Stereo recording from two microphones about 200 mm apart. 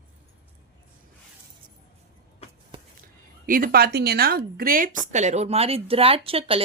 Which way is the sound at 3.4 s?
45° right (ahead or behind).